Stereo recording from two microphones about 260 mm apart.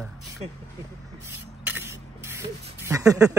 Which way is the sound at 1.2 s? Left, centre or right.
Centre.